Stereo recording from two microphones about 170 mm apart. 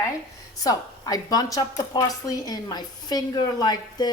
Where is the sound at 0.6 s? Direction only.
20° left (ahead or behind).